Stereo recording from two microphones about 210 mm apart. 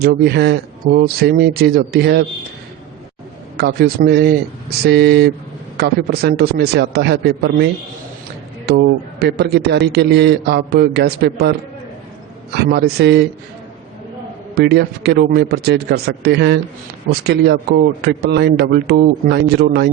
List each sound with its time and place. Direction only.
0.0 s a man's voice: 50° right (ahead or behind)
3.6 s a man's voice: 50° right (ahead or behind)
12.5 s a man's voice: 50° right (ahead or behind)
14.5 s a man's voice: 50° right (ahead or behind)